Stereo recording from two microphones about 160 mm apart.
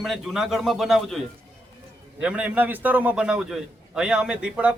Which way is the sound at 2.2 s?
10° right (ahead or behind).